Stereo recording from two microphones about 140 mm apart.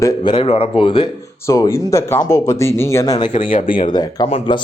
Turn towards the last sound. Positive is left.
turn(degrees=40)  # may be behind; listen again after turning